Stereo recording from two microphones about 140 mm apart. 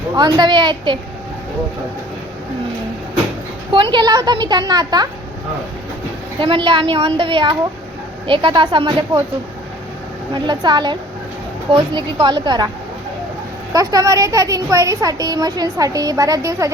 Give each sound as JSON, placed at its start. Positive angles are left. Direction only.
{"t": 0.2, "sound": "a woman's voice", "side_deg": -30}
{"t": 3.9, "sound": "speech", "side_deg": -30}
{"t": 6.4, "sound": "a woman's voice", "side_deg": -35}
{"t": 10.3, "sound": "a woman's voice", "side_deg": -35}
{"t": 13.7, "sound": "speech", "side_deg": -25}